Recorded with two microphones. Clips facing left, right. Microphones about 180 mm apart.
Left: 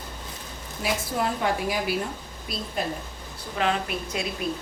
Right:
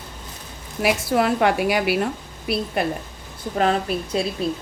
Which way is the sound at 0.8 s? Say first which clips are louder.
Right 7 dB; 70° right (ahead or behind).